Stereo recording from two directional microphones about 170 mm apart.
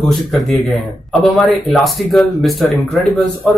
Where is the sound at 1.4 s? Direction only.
Centre (ahead or behind).